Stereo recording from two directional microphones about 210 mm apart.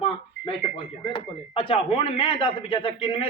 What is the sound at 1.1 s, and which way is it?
Speech, 25° left (ahead or behind).